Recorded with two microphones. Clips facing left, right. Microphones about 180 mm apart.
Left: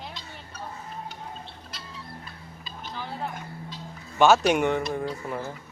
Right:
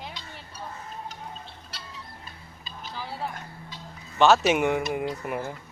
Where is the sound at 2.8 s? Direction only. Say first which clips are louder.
Even; 5° right (ahead or behind).